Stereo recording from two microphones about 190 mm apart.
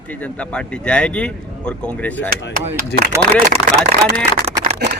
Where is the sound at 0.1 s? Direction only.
5° left (ahead or behind).